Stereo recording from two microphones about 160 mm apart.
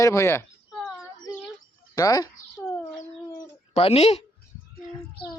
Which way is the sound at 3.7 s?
40° left (ahead or behind).